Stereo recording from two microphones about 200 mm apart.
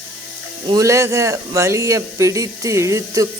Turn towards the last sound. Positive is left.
turn(degrees=-15)  # may be behind; listen again after turning